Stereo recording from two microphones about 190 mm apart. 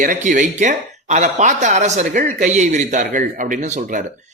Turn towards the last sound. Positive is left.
turn(degrees=-40)  # may be behind; listen again after turning